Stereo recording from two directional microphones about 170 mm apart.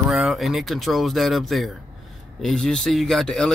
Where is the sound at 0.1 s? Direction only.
Centre (ahead or behind).